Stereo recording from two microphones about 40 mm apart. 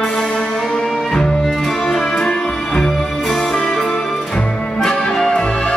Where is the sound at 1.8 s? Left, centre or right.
Centre.